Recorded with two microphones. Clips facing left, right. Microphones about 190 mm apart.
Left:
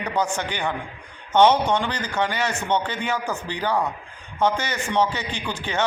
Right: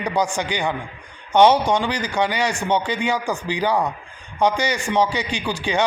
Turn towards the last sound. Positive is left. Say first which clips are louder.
# right 5 dB
turn(degrees=-10)  # may be behind; listen again after turning